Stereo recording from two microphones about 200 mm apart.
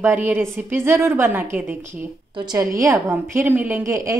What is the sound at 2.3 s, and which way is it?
A woman's voice, 20° right (ahead or behind).